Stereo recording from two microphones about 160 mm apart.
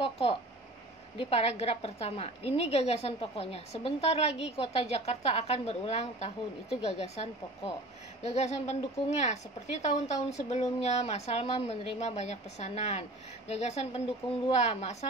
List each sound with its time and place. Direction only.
0.0 s a woman's voice: 40° left (ahead or behind)